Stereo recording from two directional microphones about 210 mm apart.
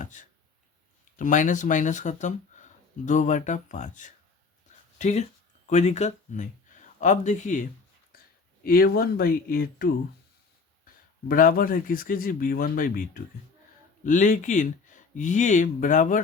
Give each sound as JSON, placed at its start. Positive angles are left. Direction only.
{"t": 0.0, "sound": "speech", "side_deg": 35}
{"t": 8.6, "sound": "speech", "side_deg": 45}
{"t": 11.3, "sound": "speech", "side_deg": 40}